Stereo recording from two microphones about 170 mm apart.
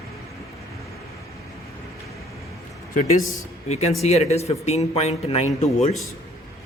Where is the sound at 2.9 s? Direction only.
40° left (ahead or behind).